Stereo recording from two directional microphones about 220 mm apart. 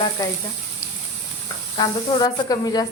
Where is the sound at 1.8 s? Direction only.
15° left (ahead or behind).